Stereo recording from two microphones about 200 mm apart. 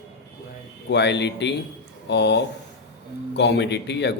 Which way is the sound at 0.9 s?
60° left (ahead or behind).